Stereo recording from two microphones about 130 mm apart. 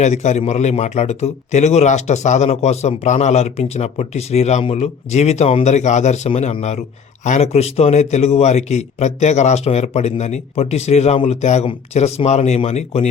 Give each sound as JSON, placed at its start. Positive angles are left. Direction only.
{"t": 0.0, "sound": "a man's voice", "side_deg": 60}
{"t": 5.6, "sound": "a man's voice", "side_deg": 60}